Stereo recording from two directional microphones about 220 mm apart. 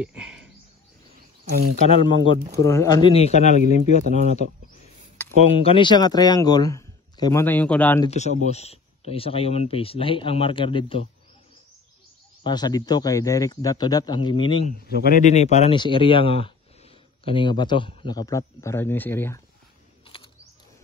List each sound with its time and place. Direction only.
0.0 s a sound: 5° right (ahead or behind)
1.5 s speech: 45° right (ahead or behind)
1.9 s speech: 25° left (ahead or behind)
2.5 s speech: 15° left (ahead or behind); by 4.0 s 30° left (ahead or behind)
5.6 s speech: 25° left (ahead or behind); by 8.0 s 5° left (ahead or behind)
8.0 s speech: 30° left (ahead or behind)
12.4 s speech: 20° left (ahead or behind)
14.9 s speech: 40° left (ahead or behind); by 19.4 s 10° left (ahead or behind)
20.1 s mechanisms: 25° left (ahead or behind)